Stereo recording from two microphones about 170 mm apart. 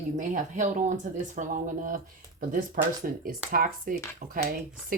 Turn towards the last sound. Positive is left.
turn(degrees=-55)  # may be behind; listen again after turning